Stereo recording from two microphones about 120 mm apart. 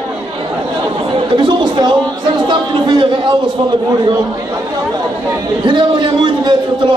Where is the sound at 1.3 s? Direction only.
40° right (ahead or behind).